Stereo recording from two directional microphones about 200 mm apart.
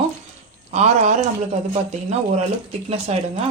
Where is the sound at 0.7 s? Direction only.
35° right (ahead or behind).